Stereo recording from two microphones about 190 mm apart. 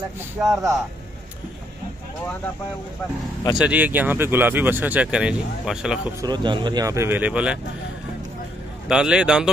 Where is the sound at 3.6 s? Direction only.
10° right (ahead or behind).